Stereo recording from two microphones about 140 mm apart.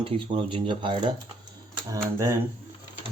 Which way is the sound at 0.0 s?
40° right (ahead or behind).